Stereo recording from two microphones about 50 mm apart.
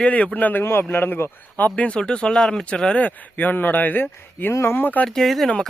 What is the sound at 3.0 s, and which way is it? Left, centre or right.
Speech, left.